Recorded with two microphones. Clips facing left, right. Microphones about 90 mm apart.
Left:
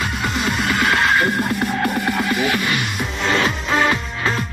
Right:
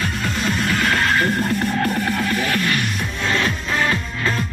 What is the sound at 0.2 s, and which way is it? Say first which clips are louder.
Music: left 1 dB; 15° left (ahead or behind).